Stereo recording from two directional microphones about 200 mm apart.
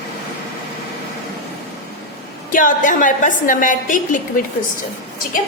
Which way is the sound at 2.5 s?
40° left (ahead or behind).